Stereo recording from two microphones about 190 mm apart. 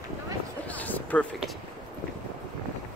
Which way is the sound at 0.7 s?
10° left (ahead or behind).